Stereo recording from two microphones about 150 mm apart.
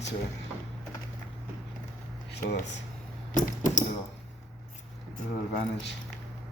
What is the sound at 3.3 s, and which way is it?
Speech, 55° left (ahead or behind).